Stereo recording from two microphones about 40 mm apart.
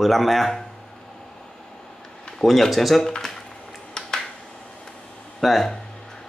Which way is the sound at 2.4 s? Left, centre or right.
Centre.